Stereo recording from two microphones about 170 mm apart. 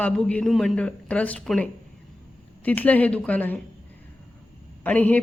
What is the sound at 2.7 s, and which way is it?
Speech, 10° left (ahead or behind).